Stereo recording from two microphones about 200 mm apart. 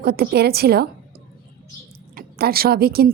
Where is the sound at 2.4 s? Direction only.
50° right (ahead or behind).